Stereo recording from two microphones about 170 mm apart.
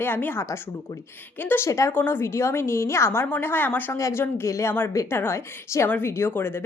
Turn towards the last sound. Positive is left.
turn(degrees=15)  # may be behind; listen again after turning